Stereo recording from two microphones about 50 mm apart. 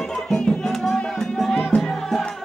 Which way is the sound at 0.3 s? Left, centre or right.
Centre.